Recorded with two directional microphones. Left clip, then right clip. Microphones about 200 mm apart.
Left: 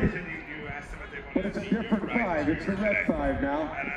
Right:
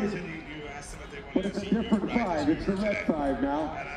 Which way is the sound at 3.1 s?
35° left (ahead or behind).